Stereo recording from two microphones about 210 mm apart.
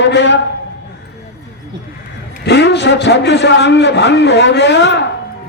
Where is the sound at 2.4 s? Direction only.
55° left (ahead or behind).